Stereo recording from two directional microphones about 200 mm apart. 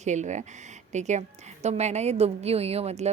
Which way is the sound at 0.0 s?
35° right (ahead or behind).